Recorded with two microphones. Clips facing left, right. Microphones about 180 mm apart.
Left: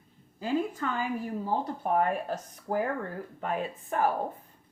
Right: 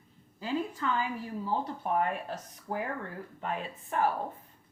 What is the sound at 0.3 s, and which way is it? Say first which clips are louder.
A woman's voice: left 4 dB; 45° left (ahead or behind).